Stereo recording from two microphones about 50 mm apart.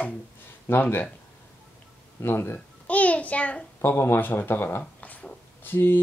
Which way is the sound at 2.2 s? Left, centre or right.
Left.